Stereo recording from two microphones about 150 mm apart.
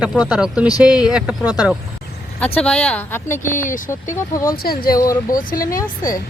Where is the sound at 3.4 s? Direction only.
60° left (ahead or behind).